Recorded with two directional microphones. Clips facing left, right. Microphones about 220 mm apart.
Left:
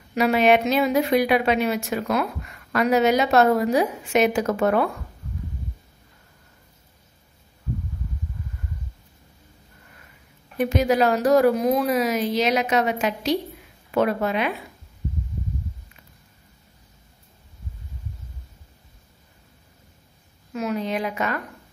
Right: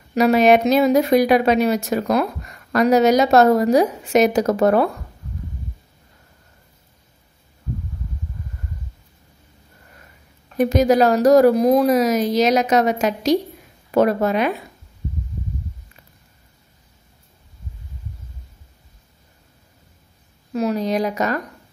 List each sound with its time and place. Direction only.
0.1 s a woman's voice: 40° right (ahead or behind)
10.6 s a woman's voice: 40° right (ahead or behind)
20.5 s a woman's voice: 35° right (ahead or behind)